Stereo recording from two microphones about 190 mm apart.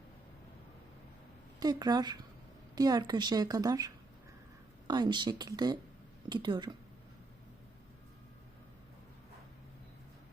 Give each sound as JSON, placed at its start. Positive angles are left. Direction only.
{"t": 1.5, "sound": "a woman's voice", "side_deg": -20}